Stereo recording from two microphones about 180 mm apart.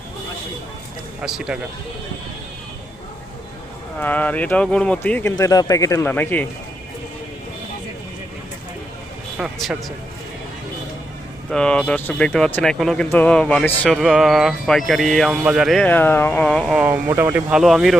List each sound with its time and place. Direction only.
1.2 s speech: 5° right (ahead or behind)
4.0 s speech: 10° left (ahead or behind)
5.4 s speech: 20° left (ahead or behind)
9.4 s speech: centre (ahead or behind)
11.5 s speech: 5° left (ahead or behind); by 17.6 s 10° right (ahead or behind)
17.6 s speech: centre (ahead or behind)